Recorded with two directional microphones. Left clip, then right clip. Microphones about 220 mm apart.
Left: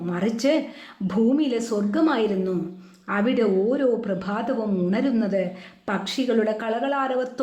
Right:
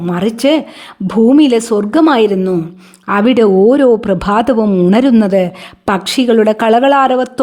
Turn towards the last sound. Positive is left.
turn(degrees=-50)  # may be behind; listen again after turning